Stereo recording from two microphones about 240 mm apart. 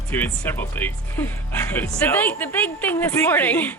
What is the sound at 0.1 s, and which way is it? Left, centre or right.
A woman's voice, centre.